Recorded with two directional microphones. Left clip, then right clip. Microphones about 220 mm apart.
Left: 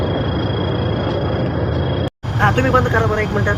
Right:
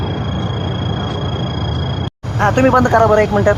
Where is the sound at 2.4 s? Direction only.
25° right (ahead or behind).